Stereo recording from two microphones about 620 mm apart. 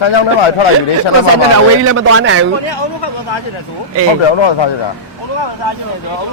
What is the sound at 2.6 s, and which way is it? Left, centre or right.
Speech, left.